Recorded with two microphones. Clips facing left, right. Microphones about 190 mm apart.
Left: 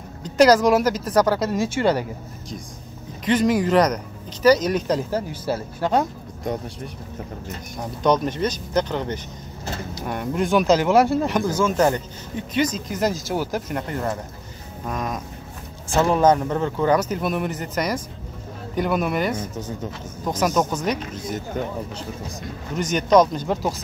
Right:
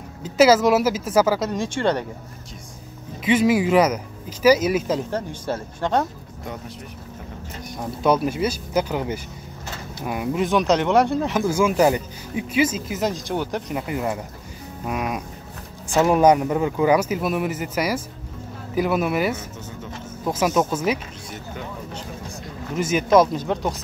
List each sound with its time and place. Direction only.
0.2 s speech: 5° right (ahead or behind)
3.3 s speech: 5° right (ahead or behind)
8.0 s speech: 5° right (ahead or behind)
13.8 s speech: 10° right (ahead or behind)
21.5 s speech: 40° left (ahead or behind)
22.8 s speech: 5° right (ahead or behind)